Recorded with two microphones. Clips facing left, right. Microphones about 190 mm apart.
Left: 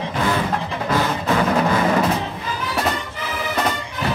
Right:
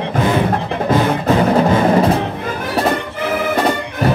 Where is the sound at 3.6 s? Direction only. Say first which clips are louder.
Right 6 dB; 50° right (ahead or behind).